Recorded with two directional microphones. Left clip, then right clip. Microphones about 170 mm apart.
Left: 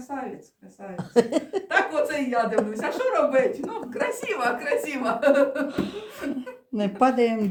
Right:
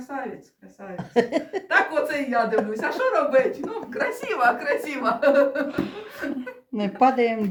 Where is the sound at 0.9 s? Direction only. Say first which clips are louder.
Left 1 dB; 20° left (ahead or behind).